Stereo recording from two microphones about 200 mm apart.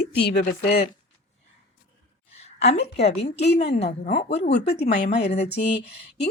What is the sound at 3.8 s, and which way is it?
Speech, 50° left (ahead or behind).